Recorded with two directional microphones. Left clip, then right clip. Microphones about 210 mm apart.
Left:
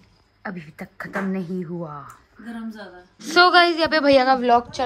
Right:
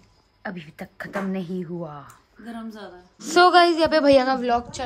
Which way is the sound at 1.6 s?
15° right (ahead or behind).